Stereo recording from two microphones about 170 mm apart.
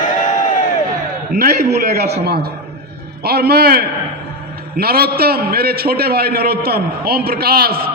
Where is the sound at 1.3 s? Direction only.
55° right (ahead or behind).